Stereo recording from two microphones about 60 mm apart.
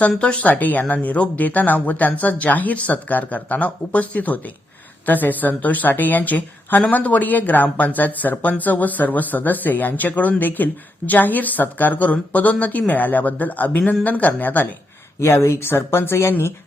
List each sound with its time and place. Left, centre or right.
0.2 s speech: left
15.2 s speech: left